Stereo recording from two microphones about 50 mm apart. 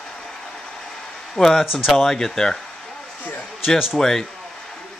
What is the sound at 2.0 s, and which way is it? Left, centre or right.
Speech, centre.